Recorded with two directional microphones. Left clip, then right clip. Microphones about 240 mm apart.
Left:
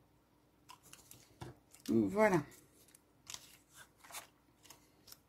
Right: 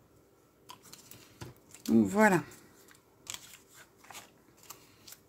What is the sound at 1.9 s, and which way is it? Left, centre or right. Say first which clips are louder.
Speech: right 6 dB; right.